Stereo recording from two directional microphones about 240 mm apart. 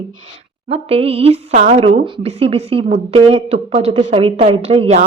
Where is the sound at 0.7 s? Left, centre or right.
Right.